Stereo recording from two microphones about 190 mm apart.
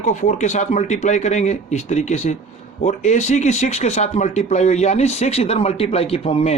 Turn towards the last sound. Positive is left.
turn(degrees=30)  # may be behind; listen again after turning